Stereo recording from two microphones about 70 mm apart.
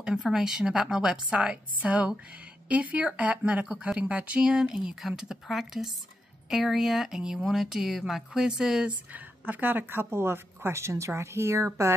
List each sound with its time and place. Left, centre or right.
0.0 s a woman's voice: centre
9.1 s speech: right